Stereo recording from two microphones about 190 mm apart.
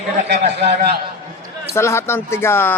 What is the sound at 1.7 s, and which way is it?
Speech, 15° left (ahead or behind).